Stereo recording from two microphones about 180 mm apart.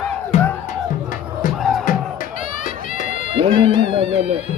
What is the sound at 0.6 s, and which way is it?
Music, 50° left (ahead or behind).